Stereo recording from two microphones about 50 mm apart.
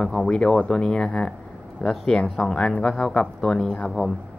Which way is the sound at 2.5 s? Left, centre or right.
Left.